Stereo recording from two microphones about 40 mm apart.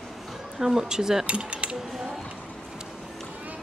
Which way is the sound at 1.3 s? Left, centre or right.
Right.